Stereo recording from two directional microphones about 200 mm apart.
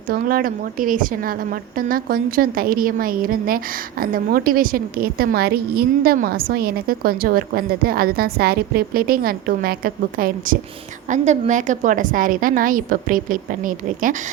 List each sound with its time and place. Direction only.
0.1 s a woman's voice: 45° right (ahead or behind)